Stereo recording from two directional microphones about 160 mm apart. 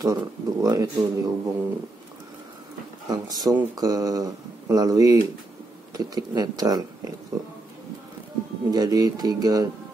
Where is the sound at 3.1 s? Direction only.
25° right (ahead or behind).